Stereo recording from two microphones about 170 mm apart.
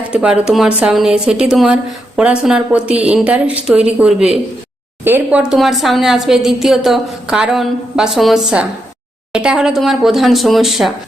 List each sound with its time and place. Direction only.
0.1 s a woman's voice: 5° right (ahead or behind)